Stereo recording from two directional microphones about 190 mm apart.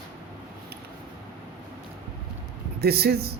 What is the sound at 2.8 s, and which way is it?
Speech, 55° right (ahead or behind).